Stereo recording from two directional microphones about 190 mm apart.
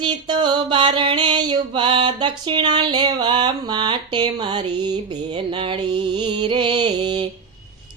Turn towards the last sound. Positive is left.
turn(degrees=-25)  # may be behind; listen again after turning